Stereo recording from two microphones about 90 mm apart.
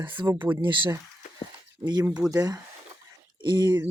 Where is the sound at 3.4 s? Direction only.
55° right (ahead or behind).